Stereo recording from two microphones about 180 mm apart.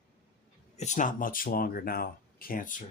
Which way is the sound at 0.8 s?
45° left (ahead or behind).